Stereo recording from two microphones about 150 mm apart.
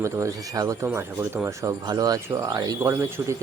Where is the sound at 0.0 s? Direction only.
20° right (ahead or behind).